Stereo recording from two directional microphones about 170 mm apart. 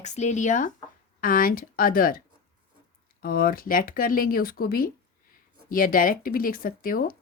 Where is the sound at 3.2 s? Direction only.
60° left (ahead or behind).